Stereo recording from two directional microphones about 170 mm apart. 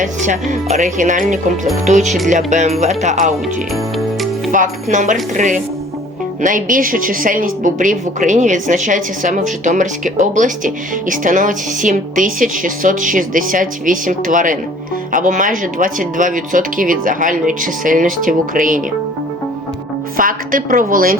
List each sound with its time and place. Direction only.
0.0 s a woman's voice: 45° right (ahead or behind)
4.5 s a woman's voice: 50° right (ahead or behind)
6.4 s a woman's voice: 50° right (ahead or behind)
20.1 s a woman's voice: 55° right (ahead or behind)